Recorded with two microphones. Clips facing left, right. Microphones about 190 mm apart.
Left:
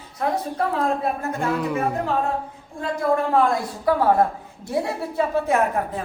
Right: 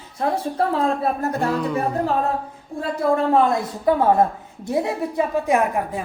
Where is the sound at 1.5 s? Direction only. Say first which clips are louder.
Right 1 dB; 5° left (ahead or behind).